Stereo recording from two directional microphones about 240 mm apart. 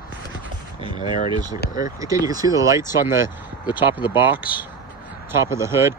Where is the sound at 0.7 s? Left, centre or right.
Centre.